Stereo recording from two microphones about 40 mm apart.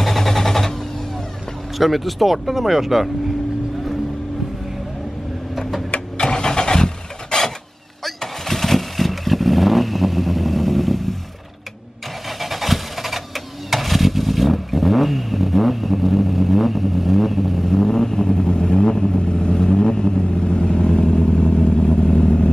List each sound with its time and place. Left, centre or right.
0.0 s a sound: centre
1.8 s speech: centre
5.6 s printer: centre
5.9 s vehicle: left; by 11.1 s centre
12.4 s vehicle: centre; by 22.5 s left